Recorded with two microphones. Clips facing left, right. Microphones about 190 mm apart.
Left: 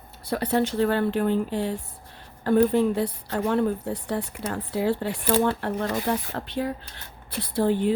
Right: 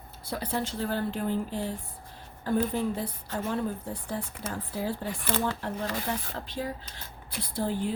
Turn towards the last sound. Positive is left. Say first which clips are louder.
# left 8 dB
turn(degrees=65)  # may be behind; listen again after turning